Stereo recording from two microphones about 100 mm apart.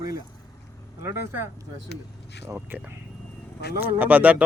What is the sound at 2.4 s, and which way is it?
Speech, 20° right (ahead or behind).